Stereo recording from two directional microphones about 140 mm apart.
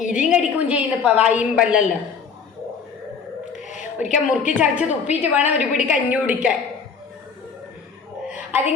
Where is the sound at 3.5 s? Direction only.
60° left (ahead or behind).